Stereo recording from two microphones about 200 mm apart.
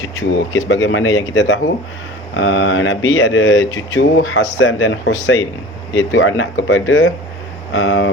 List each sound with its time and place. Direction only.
0.0 s speech: 80° left